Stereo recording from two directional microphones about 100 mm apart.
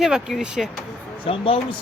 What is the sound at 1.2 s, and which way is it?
Speech, 60° left (ahead or behind).